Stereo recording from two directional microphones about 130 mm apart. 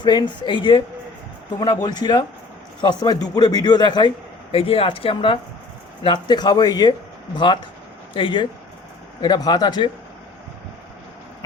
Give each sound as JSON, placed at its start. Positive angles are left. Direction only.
{"t": 0.0, "sound": "speech", "side_deg": 35}
{"t": 4.5, "sound": "speech", "side_deg": 50}